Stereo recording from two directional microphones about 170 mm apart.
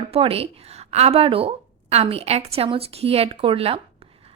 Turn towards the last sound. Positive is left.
turn(degrees=-35)  # may be behind; listen again after turning